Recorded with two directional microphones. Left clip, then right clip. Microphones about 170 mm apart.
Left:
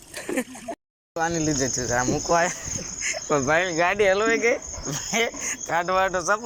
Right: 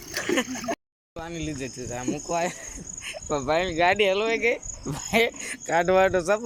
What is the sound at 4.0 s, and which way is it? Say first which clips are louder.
Speech: left 3 dB; 15° right (ahead or behind).